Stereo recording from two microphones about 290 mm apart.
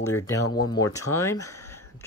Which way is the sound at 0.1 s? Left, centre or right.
Left.